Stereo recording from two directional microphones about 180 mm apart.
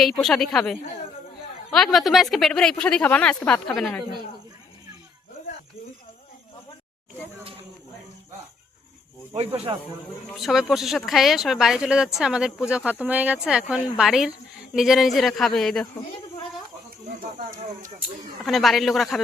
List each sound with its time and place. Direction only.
0.0 s speech: centre (ahead or behind)
9.3 s speech: 35° right (ahead or behind)
10.3 s speech: centre (ahead or behind)
18.4 s speech: centre (ahead or behind)